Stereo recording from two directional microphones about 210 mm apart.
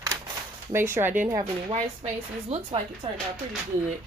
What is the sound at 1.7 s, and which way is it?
Speech, 30° right (ahead or behind).